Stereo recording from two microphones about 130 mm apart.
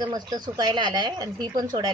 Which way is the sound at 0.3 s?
30° right (ahead or behind).